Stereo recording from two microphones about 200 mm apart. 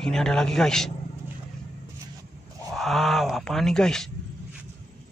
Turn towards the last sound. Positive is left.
turn(degrees=5)  # may be behind; listen again after turning